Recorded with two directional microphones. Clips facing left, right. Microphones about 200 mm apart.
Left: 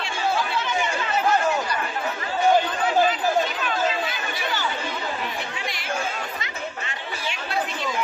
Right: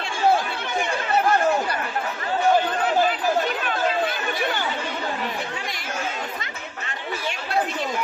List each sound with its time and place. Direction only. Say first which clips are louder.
0.3 s chatter: right 4 dB; 55° right (ahead or behind)
3.8 s chatter: right 3 dB; 50° right (ahead or behind)